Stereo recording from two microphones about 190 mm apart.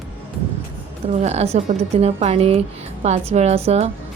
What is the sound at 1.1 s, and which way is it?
A woman's voice, 35° right (ahead or behind).